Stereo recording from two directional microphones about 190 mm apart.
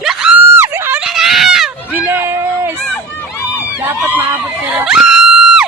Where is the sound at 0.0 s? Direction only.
5° right (ahead or behind).